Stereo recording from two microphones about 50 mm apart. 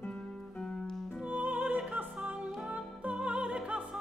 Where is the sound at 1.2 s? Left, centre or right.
Right.